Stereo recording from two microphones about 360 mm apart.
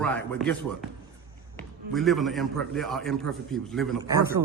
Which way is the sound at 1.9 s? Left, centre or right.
Centre.